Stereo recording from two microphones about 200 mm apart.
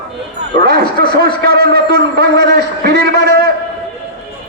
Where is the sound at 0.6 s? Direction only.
50° right (ahead or behind).